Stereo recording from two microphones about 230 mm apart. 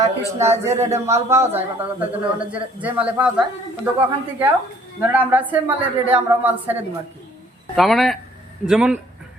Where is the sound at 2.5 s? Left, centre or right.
Centre.